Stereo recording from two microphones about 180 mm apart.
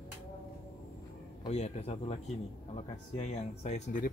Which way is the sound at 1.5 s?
35° left (ahead or behind).